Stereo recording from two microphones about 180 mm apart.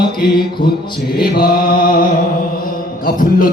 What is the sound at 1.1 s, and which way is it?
Speech, 55° left (ahead or behind).